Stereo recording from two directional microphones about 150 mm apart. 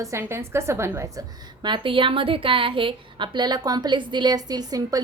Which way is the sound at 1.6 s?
35° right (ahead or behind).